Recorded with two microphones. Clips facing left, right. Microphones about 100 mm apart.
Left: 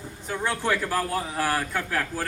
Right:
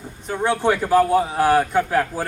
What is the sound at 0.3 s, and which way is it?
A man's voice, 20° right (ahead or behind).